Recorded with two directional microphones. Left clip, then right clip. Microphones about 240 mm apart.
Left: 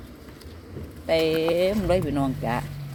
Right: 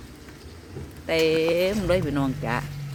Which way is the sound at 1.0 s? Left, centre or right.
Centre.